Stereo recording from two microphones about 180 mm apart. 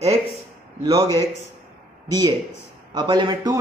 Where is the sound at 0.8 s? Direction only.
20° right (ahead or behind).